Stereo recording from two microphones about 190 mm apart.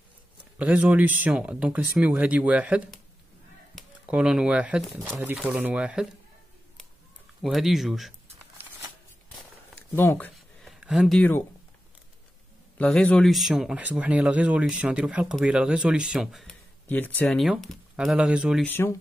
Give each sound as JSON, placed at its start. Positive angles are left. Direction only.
{"t": 0.6, "sound": "speech", "side_deg": -5}
{"t": 7.4, "sound": "speech", "side_deg": 0}
{"t": 9.9, "sound": "speech", "side_deg": 10}
{"t": 12.7, "sound": "speech", "side_deg": 5}
{"t": 16.8, "sound": "speech", "side_deg": 10}
{"t": 18.7, "sound": "speech", "side_deg": 15}